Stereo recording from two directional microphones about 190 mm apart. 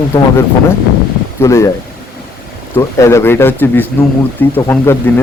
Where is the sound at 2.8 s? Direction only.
15° left (ahead or behind).